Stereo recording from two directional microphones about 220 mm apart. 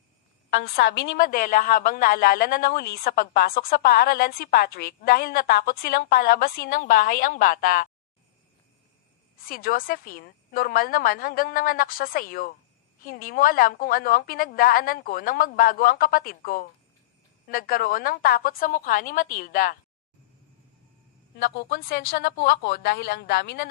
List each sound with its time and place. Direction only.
1.1 s a woman's voice: 40° left (ahead or behind)
9.4 s a woman's voice: 40° left (ahead or behind)
21.3 s a woman's voice: 45° left (ahead or behind)